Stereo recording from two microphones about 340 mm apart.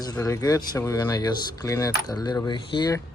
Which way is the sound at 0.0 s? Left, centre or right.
Centre.